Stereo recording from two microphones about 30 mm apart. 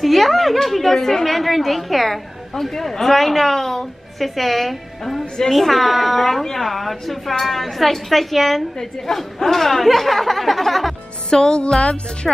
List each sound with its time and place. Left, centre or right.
0.0 s a woman's voice: centre
11.2 s music: left